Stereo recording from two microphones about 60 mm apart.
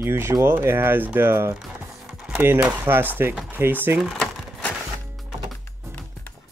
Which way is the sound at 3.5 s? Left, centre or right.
Right.